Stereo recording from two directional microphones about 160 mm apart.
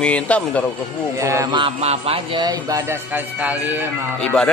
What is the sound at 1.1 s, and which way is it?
Speech, 20° right (ahead or behind).